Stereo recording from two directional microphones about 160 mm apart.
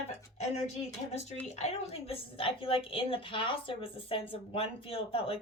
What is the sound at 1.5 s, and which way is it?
A woman's voice, 40° left (ahead or behind).